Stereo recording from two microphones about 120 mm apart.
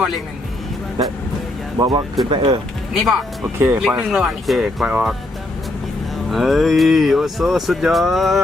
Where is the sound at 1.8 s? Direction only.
35° right (ahead or behind).